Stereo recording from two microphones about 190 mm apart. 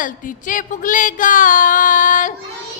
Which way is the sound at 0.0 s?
45° left (ahead or behind).